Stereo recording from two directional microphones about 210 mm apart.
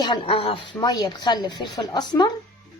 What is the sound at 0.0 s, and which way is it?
A woman's voice, 20° left (ahead or behind).